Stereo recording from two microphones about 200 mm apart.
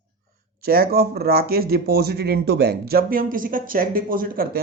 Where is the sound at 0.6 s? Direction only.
50° right (ahead or behind).